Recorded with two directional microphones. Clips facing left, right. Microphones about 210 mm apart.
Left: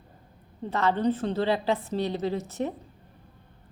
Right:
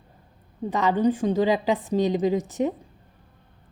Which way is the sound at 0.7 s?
15° right (ahead or behind).